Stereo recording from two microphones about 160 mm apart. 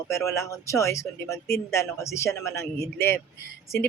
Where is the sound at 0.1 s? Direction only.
15° left (ahead or behind).